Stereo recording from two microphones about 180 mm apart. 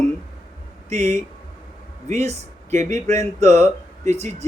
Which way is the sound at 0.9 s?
40° right (ahead or behind).